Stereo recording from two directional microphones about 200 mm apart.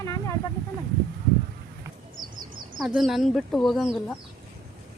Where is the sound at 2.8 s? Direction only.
Centre (ahead or behind).